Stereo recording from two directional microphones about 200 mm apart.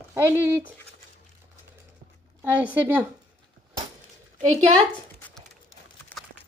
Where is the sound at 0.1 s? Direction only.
10° right (ahead or behind).